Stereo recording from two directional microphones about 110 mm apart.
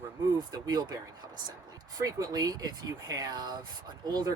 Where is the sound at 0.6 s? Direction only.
40° right (ahead or behind).